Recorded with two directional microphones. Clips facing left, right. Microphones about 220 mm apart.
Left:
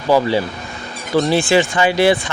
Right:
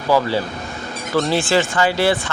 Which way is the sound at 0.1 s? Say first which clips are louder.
Left 3 dB; 15° left (ahead or behind).